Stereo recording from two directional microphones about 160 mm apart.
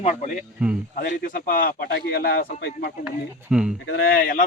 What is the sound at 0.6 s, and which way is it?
Speech, 5° right (ahead or behind).